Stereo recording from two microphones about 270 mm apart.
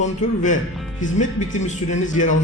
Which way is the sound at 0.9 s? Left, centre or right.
Left.